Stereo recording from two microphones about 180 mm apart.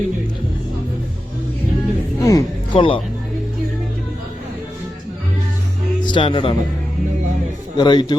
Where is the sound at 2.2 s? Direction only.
20° left (ahead or behind).